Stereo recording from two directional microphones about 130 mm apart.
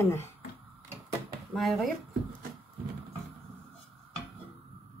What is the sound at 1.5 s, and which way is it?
Speech, centre (ahead or behind).